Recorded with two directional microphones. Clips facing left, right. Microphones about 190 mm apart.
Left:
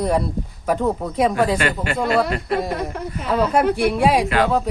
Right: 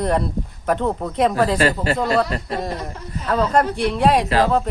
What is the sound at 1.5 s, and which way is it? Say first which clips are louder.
Speech: right 3 dB; 35° right (ahead or behind).